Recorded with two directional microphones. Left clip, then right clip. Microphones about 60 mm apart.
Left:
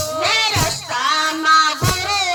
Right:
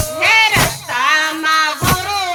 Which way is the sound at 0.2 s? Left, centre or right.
Right.